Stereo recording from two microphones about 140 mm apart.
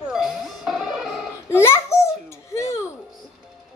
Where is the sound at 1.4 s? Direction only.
20° left (ahead or behind).